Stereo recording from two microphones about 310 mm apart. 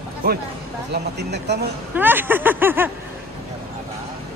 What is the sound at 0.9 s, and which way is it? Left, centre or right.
Speech, right.